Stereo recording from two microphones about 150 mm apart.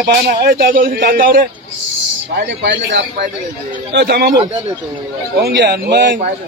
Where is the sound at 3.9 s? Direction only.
90° right.